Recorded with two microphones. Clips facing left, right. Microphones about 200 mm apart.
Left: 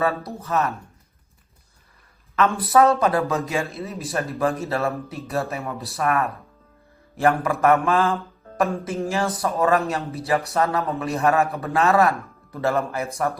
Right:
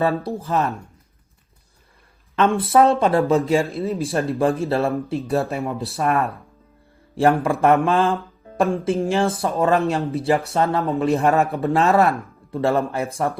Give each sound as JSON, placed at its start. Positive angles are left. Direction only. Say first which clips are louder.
{"t": 0.0, "sound": "speech", "louder": "right 3 dB", "side_deg": -30}
{"t": 2.3, "sound": "speech", "louder": "right 2 dB", "side_deg": -30}